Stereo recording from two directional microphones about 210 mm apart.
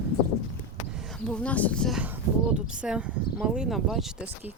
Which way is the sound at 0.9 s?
Centre (ahead or behind).